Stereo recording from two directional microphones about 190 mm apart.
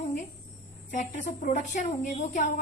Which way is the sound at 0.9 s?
40° left (ahead or behind).